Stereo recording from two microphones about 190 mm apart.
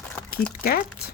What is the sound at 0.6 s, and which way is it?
Speech, 50° left (ahead or behind).